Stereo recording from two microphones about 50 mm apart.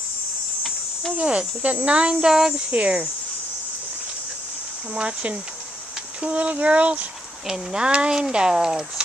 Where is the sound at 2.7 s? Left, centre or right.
Right.